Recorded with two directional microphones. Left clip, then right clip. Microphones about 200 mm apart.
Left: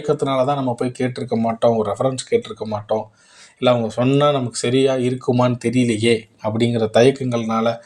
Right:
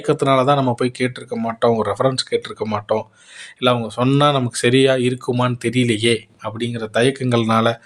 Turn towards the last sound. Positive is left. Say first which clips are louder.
# right 3 dB
turn(degrees=-35)  # may be behind; listen again after turning